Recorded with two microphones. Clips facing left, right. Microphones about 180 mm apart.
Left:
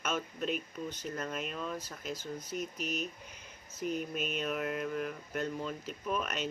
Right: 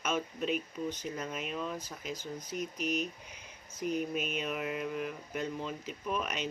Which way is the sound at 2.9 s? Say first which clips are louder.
Right 3 dB; 45° left (ahead or behind).